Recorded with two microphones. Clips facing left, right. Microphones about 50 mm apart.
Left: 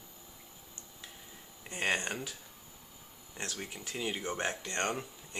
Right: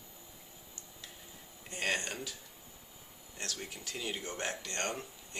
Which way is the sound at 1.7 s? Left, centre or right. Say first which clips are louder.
Left 2 dB; left.